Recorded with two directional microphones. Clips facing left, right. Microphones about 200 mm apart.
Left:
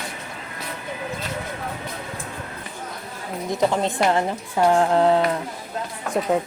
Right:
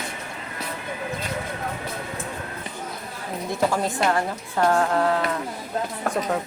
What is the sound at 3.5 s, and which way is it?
A woman's voice, 25° left (ahead or behind).